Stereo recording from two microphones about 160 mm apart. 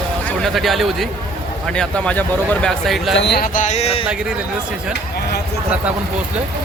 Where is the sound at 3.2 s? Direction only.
90° left.